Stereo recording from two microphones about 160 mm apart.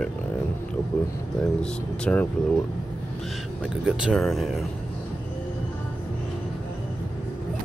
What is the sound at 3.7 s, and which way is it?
Speech, 5° right (ahead or behind).